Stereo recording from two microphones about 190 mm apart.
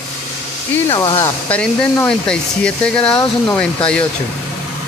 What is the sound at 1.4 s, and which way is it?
Speech, 5° left (ahead or behind).